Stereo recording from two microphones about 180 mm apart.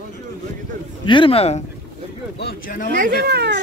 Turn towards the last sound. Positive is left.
turn(degrees=-65)  # may be behind; listen again after turning